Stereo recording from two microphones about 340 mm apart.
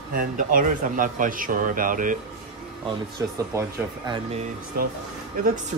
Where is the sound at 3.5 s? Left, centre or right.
Centre.